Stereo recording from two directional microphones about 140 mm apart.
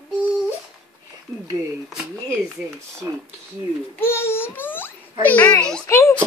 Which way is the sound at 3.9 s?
15° left (ahead or behind).